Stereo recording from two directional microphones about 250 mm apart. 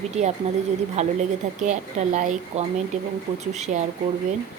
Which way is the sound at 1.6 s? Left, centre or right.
Right.